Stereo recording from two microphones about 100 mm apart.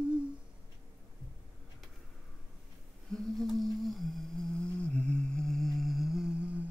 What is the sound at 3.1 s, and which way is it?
Humming, centre (ahead or behind).